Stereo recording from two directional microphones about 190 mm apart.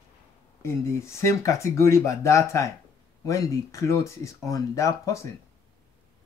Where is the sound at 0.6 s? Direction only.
15° left (ahead or behind).